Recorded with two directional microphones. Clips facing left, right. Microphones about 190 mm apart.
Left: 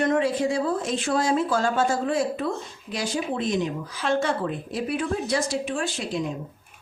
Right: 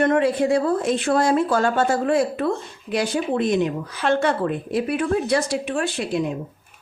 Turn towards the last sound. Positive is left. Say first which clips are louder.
# right 4 dB
turn(degrees=-60)  # may be behind; listen again after turning